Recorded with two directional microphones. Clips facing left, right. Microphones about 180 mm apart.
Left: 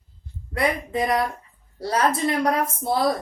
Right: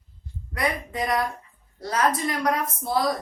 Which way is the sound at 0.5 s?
30° left (ahead or behind).